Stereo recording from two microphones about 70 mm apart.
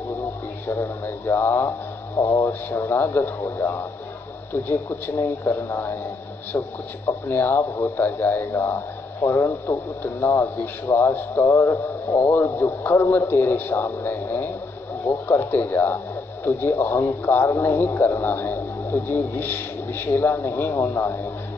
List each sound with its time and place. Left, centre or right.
0.7 s a man's voice: left
12.5 s a man's voice: left